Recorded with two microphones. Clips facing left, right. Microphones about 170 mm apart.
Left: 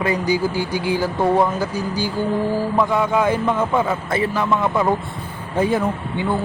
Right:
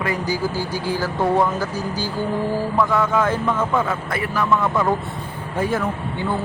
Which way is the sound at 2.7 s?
15° left (ahead or behind).